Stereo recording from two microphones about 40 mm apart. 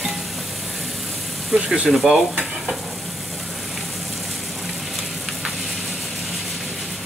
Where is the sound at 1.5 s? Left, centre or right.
Right.